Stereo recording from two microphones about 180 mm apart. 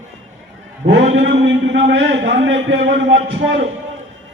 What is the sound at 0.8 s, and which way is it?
A man's voice, 90° right.